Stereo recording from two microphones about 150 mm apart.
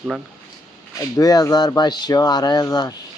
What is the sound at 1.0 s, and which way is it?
Speech, 25° left (ahead or behind).